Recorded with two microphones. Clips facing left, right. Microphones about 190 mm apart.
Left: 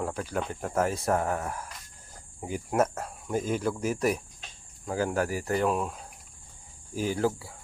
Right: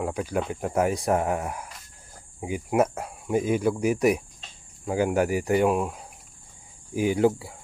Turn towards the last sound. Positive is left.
turn(degrees=-20)  # may be behind; listen again after turning